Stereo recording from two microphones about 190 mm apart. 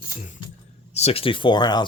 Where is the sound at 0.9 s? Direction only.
30° left (ahead or behind).